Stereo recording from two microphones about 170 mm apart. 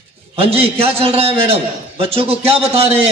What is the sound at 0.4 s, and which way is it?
A man's voice, 35° right (ahead or behind).